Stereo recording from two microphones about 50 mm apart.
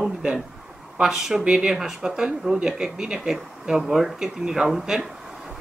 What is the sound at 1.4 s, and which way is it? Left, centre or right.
Speech, centre.